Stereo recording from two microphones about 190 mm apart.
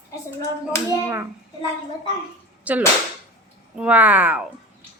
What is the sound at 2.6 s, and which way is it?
Speech, 10° right (ahead or behind).